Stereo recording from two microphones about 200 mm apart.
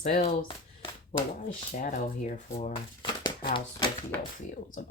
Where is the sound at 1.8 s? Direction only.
40° left (ahead or behind).